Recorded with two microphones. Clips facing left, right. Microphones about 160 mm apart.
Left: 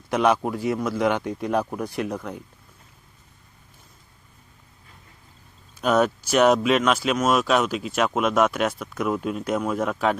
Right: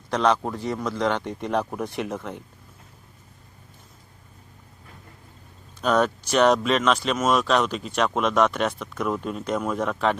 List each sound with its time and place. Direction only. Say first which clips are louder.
0.1 s speech: left 1 dB; 10° left (ahead or behind)
5.8 s speech: left 1 dB; 5° left (ahead or behind)